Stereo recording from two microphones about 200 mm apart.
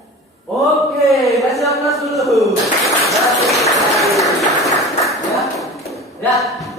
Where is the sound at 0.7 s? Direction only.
Centre (ahead or behind).